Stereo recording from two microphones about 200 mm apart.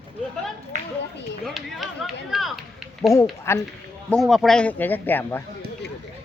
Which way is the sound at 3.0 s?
15° left (ahead or behind).